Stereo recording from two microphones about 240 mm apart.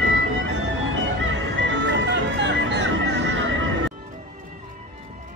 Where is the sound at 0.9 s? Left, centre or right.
Right.